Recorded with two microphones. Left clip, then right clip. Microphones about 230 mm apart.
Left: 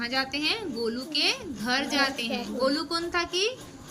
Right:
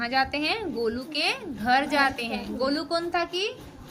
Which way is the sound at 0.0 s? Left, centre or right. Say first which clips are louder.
Right 3 dB; centre.